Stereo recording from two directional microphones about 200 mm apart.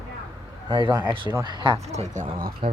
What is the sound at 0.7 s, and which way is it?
Speech, 20° right (ahead or behind).